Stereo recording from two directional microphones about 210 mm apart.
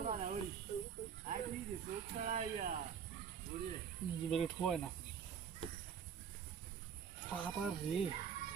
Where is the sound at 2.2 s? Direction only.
35° right (ahead or behind).